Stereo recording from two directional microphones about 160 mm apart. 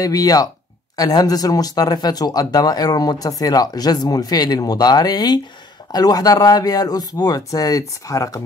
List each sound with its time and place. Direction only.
0.0 s speech: 25° left (ahead or behind)